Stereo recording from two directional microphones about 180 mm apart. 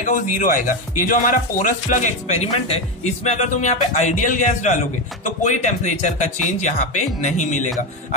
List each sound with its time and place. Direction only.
0.0 s speech: 50° left (ahead or behind)